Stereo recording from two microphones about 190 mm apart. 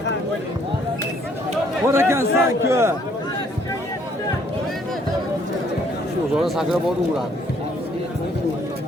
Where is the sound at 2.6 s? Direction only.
15° right (ahead or behind).